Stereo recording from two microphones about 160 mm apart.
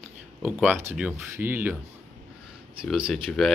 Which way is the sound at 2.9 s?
5° right (ahead or behind).